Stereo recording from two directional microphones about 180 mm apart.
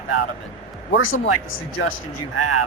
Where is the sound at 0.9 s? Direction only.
90° left.